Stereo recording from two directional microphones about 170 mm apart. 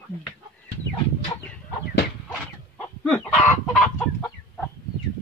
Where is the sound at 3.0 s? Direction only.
10° left (ahead or behind).